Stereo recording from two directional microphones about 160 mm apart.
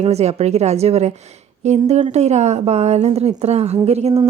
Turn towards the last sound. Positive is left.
turn(degrees=-40)  # may be behind; listen again after turning